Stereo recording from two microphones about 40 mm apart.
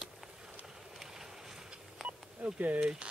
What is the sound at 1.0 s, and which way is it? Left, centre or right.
Boat, centre.